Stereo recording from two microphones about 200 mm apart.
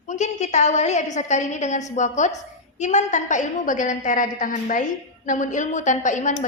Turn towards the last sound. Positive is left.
turn(degrees=40)  # may be behind; listen again after turning